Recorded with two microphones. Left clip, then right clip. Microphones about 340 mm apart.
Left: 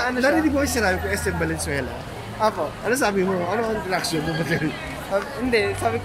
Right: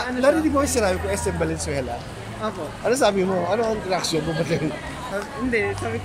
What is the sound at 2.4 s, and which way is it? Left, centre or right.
Speech, centre.